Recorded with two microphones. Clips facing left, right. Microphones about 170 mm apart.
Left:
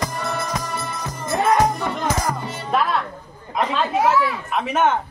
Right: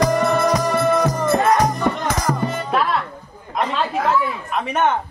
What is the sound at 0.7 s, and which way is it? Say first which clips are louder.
Music: right 12 dB; 85° right.